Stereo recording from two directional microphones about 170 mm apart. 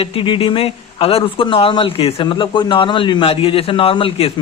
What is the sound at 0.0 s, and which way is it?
Speech, 30° left (ahead or behind).